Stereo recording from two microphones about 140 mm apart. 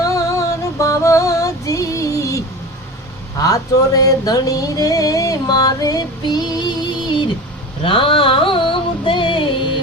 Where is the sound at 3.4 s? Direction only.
25° left (ahead or behind).